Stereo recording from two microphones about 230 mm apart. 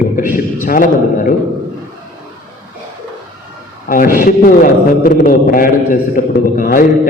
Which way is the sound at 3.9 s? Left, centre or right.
Left.